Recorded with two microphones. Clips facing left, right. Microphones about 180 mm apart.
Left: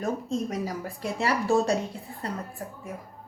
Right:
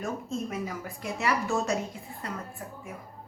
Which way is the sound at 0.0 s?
35° left (ahead or behind).